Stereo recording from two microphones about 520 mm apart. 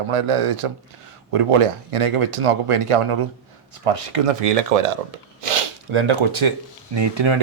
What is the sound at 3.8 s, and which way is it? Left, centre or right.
Speech, right.